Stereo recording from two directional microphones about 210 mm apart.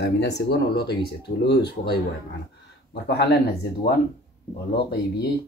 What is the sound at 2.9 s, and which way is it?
Speech, 55° left (ahead or behind).